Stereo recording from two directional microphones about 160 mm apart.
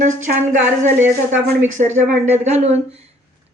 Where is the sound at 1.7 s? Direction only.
45° right (ahead or behind).